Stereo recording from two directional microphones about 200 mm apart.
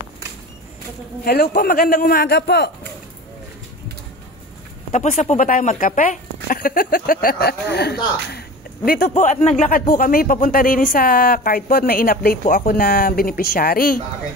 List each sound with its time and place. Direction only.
1.2 s speech: 50° left (ahead or behind)
4.9 s speech: 35° left (ahead or behind)